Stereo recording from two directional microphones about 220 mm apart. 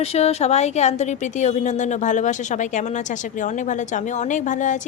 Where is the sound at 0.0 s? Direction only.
30° left (ahead or behind).